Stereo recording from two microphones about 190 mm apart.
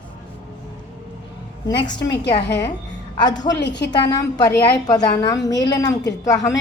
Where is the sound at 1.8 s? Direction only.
20° left (ahead or behind).